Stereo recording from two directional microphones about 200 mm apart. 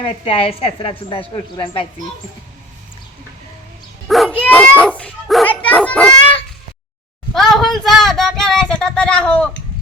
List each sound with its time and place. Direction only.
0.0 s a woman's voice: 30° left (ahead or behind)
4.1 s dog: 5° left (ahead or behind)
7.3 s child singing: centre (ahead or behind)